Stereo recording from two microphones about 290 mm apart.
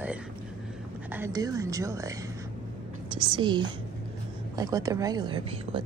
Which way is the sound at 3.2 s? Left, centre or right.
Centre.